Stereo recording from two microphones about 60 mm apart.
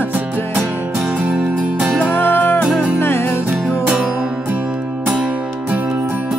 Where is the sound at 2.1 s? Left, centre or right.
Left.